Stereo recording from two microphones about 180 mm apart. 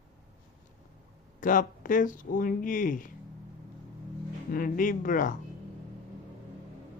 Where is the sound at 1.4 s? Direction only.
50° left (ahead or behind).